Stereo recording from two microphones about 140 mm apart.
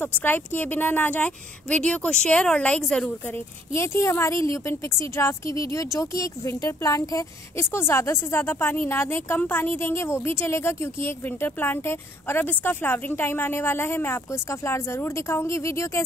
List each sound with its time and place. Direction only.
0.0 s a woman's voice: 15° left (ahead or behind)